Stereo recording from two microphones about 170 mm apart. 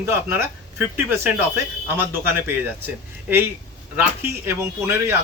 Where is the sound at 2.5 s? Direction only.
10° right (ahead or behind).